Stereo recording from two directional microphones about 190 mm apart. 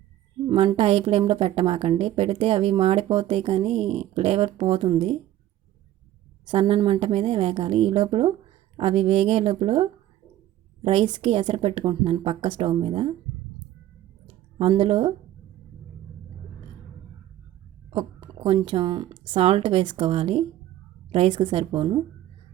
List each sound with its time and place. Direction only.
0.4 s a woman's voice: 25° right (ahead or behind)
6.4 s a woman's voice: 30° right (ahead or behind)
14.3 s a sound: 30° right (ahead or behind)
17.9 s speech: 25° right (ahead or behind)